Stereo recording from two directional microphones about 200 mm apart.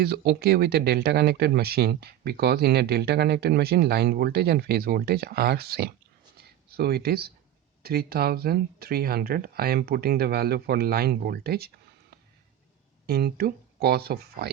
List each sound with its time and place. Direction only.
0.0 s speech: 50° right (ahead or behind)
6.3 s a sound: 50° right (ahead or behind)
7.8 s speech: 50° right (ahead or behind)
13.1 s speech: 50° right (ahead or behind)